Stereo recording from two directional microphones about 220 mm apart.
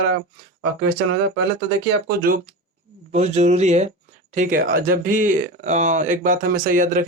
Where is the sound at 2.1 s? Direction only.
40° right (ahead or behind).